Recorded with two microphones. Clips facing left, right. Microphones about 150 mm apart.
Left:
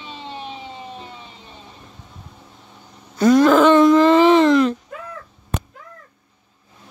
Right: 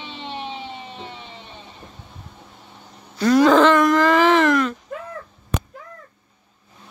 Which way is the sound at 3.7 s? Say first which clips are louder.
Left 4 dB; 25° left (ahead or behind).